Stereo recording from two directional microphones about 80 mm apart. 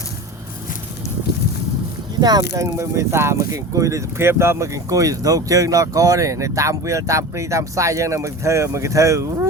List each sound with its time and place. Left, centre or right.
2.6 s speech: right